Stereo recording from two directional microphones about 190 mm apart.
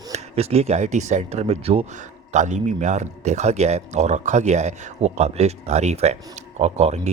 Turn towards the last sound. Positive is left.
turn(degrees=-35)  # may be behind; listen again after turning